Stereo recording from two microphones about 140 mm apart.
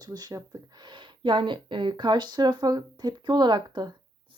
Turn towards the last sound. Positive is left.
turn(degrees=-30)  # may be behind; listen again after turning